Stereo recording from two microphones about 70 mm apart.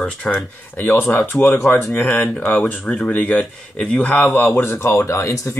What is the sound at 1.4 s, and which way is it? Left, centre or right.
Speech, left.